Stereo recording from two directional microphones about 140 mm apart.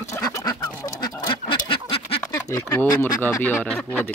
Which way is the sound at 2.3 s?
25° left (ahead or behind).